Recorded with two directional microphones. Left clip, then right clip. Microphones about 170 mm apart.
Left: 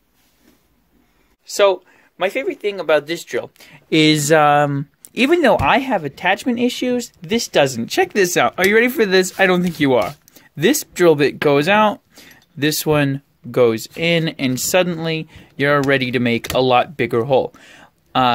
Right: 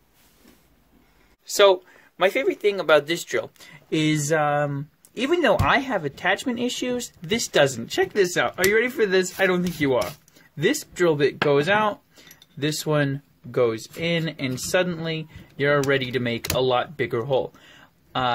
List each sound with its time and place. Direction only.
1.4 s speech: 10° left (ahead or behind)
3.9 s speech: 45° left (ahead or behind)